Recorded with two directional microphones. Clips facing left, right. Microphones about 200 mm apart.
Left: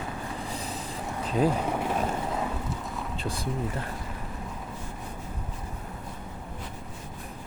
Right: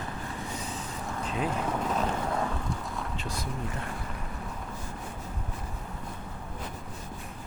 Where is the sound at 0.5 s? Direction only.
35° left (ahead or behind).